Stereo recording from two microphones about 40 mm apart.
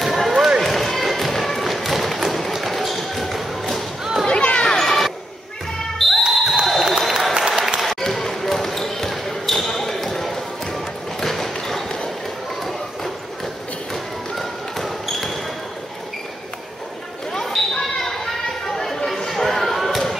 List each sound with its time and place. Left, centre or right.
0.0 s run: centre
0.3 s run: centre
0.6 s music: centre
4.3 s a sound: left
4.7 s a sound: centre
5.9 s basketball bounce: centre
6.6 s applause: centre
7.0 s applause: centre
7.8 s basketball bounce: centre
14.4 s basketball bounce: centre
17.6 s basketball bounce: centre
18.7 s a sound: centre